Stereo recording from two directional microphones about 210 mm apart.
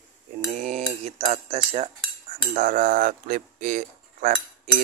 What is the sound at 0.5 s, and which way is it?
Cutlery, 35° right (ahead or behind).